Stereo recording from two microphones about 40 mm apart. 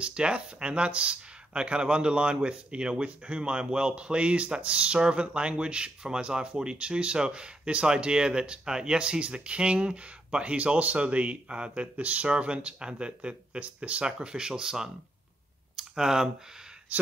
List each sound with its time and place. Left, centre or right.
0.0 s speech: right
15.7 s clicking: centre